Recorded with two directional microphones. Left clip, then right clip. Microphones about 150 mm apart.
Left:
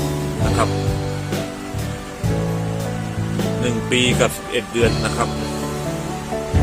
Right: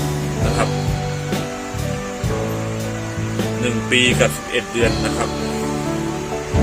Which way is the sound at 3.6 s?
10° left (ahead or behind).